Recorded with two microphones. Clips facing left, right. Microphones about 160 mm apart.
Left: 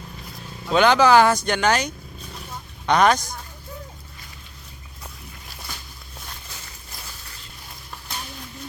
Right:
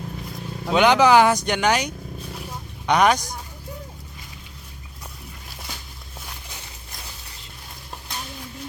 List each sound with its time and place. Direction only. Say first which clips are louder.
0.7 s speech: even; 15° right (ahead or behind)